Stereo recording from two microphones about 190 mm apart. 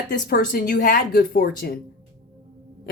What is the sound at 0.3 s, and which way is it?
Speech, 50° left (ahead or behind).